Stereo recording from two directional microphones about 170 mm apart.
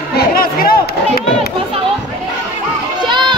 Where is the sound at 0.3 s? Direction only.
60° left (ahead or behind).